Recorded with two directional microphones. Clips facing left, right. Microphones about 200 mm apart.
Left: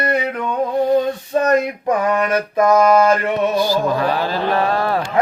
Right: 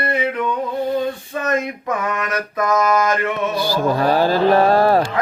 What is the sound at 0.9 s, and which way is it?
Male singing, 40° left (ahead or behind).